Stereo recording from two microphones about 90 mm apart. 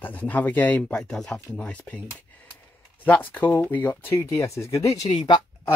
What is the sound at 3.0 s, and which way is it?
Speech, 20° left (ahead or behind).